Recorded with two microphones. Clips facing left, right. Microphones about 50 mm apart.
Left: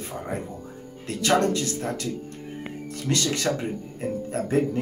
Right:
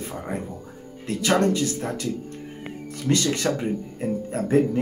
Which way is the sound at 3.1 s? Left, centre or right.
Right.